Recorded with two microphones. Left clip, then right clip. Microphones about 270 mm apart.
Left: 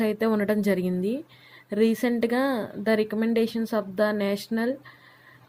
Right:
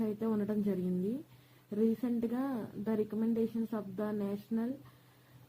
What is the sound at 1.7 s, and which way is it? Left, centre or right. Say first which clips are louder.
Speech: left 10 dB; left.